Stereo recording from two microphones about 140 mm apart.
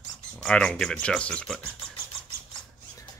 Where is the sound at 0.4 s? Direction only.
5° left (ahead or behind).